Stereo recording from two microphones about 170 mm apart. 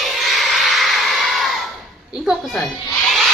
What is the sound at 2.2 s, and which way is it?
Speech, centre (ahead or behind).